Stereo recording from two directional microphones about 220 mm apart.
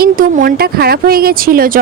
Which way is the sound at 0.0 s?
40° right (ahead or behind).